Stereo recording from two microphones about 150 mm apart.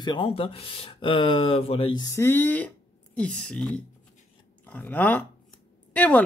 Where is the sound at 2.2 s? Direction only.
15° left (ahead or behind).